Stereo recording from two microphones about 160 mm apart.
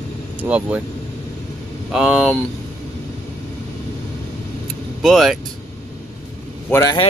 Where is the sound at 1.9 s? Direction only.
5° right (ahead or behind).